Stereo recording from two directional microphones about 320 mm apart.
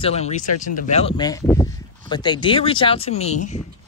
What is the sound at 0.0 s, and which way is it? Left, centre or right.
Speech, centre.